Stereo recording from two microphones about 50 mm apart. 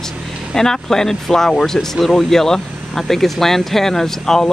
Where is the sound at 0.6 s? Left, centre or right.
Centre.